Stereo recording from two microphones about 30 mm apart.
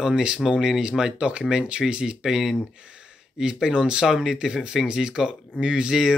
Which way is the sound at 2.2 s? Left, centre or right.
Centre.